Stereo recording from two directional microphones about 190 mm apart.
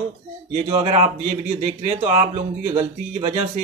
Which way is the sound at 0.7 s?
35° right (ahead or behind).